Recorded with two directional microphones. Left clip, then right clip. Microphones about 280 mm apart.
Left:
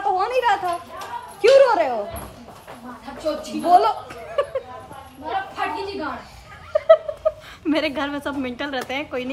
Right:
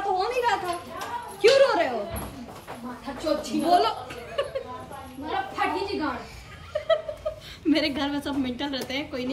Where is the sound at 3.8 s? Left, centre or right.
Centre.